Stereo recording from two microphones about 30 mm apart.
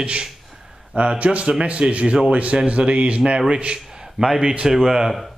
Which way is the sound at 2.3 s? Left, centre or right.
Right.